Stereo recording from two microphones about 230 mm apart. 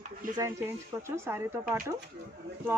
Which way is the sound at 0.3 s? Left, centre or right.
Centre.